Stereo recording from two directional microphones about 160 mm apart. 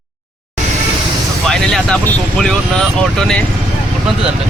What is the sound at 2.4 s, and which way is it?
Speech, 5° left (ahead or behind).